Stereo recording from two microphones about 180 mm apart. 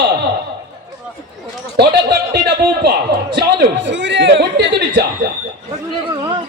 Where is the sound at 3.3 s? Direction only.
85° right.